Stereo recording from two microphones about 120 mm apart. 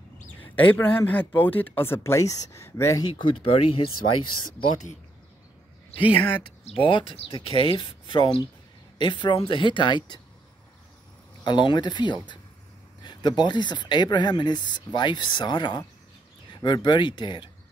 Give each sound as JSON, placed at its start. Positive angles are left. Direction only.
{"t": 0.6, "sound": "speech", "side_deg": 15}
{"t": 3.0, "sound": "speech", "side_deg": 40}
{"t": 6.1, "sound": "speech", "side_deg": 45}
{"t": 11.4, "sound": "speech", "side_deg": 40}